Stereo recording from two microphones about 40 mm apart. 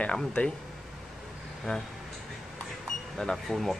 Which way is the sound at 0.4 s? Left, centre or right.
Left.